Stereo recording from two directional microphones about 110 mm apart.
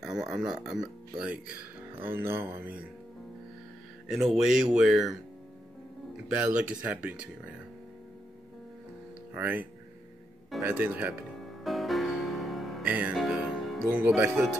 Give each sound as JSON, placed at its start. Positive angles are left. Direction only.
{"t": 0.0, "sound": "speech", "side_deg": -5}
{"t": 4.1, "sound": "speech", "side_deg": -5}
{"t": 6.2, "sound": "speech", "side_deg": -10}
{"t": 9.3, "sound": "speech", "side_deg": -15}
{"t": 11.4, "sound": "music", "side_deg": 0}
{"t": 12.8, "sound": "music", "side_deg": -15}
{"t": 13.1, "sound": "music", "side_deg": 0}
{"t": 13.8, "sound": "speech", "side_deg": -20}